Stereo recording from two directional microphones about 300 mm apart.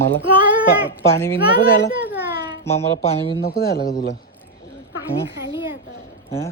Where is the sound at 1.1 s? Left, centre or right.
Centre.